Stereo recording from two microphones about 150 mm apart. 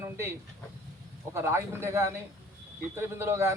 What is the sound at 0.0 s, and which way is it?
Speech, 15° right (ahead or behind).